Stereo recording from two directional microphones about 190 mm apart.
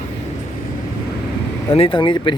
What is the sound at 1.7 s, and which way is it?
Speech, 25° left (ahead or behind).